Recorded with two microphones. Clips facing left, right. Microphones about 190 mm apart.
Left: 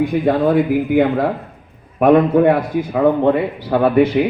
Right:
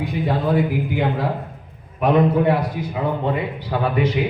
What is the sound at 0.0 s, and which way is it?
A man's voice, 55° left (ahead or behind).